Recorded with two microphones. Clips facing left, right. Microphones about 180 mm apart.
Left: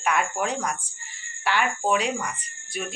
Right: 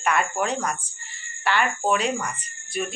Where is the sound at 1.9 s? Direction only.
10° left (ahead or behind).